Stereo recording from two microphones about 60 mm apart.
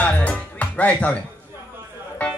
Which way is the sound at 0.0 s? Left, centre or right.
Left.